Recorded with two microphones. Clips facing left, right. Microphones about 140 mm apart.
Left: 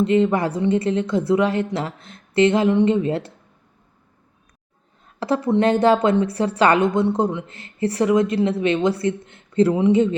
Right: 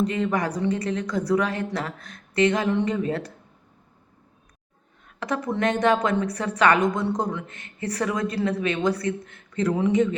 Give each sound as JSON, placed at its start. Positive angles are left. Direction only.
{"t": 0.0, "sound": "a woman's voice", "side_deg": 25}
{"t": 5.0, "sound": "a woman's voice", "side_deg": 30}